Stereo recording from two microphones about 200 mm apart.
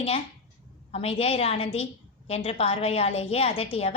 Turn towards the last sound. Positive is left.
turn(degrees=30)  # may be behind; listen again after turning